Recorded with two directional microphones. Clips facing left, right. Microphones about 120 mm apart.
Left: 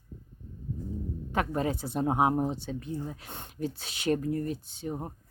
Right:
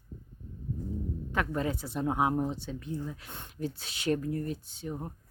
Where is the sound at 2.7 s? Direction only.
40° left (ahead or behind).